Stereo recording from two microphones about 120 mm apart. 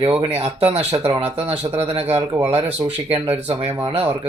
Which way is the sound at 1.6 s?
15° right (ahead or behind).